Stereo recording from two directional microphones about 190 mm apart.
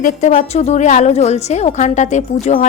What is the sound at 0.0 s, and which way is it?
A woman's voice, 40° left (ahead or behind).